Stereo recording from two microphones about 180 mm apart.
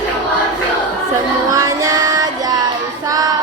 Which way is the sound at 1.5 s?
20° right (ahead or behind).